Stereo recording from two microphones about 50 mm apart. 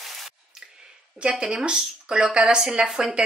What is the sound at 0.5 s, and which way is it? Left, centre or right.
Squish, centre.